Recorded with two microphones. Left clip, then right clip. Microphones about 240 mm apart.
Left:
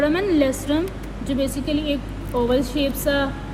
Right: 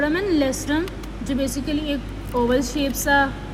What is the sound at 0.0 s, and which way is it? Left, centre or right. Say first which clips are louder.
A woman's voice: left 2 dB; right.